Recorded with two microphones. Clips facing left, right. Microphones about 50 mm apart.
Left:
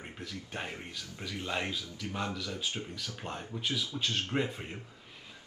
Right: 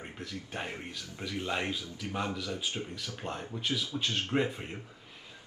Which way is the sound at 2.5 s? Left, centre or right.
Right.